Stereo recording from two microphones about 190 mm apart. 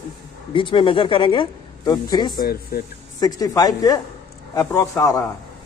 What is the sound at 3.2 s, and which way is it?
A woman's voice, 20° left (ahead or behind).